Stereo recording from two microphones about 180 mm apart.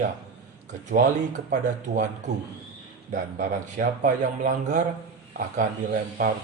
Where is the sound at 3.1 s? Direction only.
50° right (ahead or behind).